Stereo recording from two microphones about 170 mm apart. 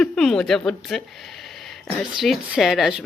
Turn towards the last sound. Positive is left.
turn(degrees=0)  # may be behind; listen again after turning